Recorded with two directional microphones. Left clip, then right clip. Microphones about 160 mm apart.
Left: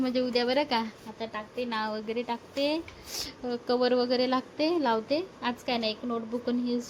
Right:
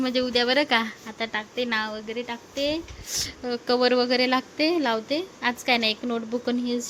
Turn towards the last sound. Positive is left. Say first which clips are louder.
# right 4 dB
turn(degrees=-10)  # may be behind; listen again after turning